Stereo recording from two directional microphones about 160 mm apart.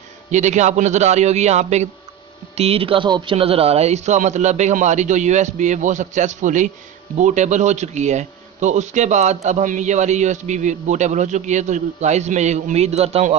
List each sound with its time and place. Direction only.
0.3 s speech: 50° right (ahead or behind)